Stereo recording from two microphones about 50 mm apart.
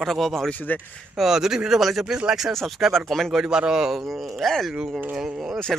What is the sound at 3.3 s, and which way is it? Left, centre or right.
Speech, centre.